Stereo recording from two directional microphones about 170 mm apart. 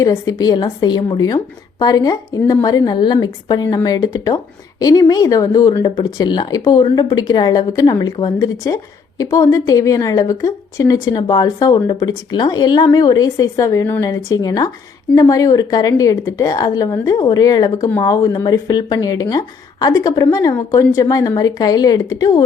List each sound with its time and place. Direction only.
0.0 s a woman's voice: 20° left (ahead or behind)